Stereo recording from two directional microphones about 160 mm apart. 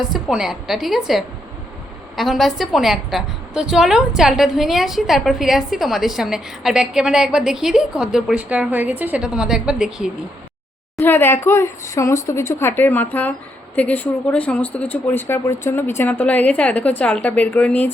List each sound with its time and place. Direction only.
0.0 s a woman's voice: 5° right (ahead or behind)
10.9 s speech: 15° left (ahead or behind)